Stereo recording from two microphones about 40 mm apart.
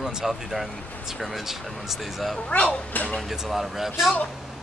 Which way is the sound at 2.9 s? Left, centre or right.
Left.